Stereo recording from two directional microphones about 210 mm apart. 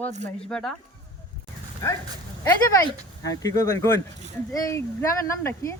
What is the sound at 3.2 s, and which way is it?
Speech, 15° left (ahead or behind).